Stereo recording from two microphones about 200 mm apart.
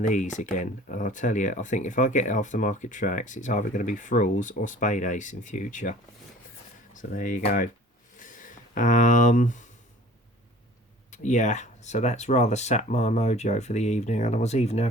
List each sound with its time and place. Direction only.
0.0 s speech: 40° left (ahead or behind)
8.2 s a sound: 40° left (ahead or behind)
11.1 s speech: 35° left (ahead or behind)